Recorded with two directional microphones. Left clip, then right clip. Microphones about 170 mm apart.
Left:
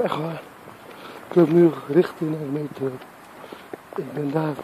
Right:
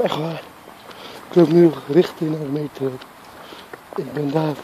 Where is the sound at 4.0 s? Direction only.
10° right (ahead or behind).